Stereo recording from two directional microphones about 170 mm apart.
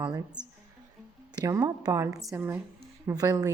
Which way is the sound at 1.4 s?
20° right (ahead or behind).